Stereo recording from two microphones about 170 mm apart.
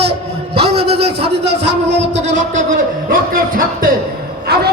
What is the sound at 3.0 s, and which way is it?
Speech, 60° right (ahead or behind).